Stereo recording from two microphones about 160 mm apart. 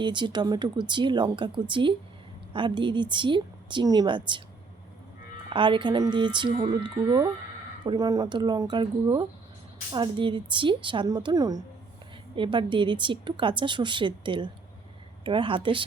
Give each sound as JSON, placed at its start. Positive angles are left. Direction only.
{"t": 0.0, "sound": "speech", "side_deg": -30}
{"t": 5.5, "sound": "a woman's voice", "side_deg": -30}